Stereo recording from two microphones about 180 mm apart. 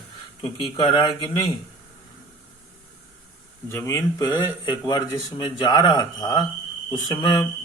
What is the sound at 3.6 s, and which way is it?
Speech, 15° left (ahead or behind).